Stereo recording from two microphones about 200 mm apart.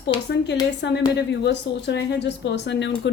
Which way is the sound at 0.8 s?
60° left (ahead or behind).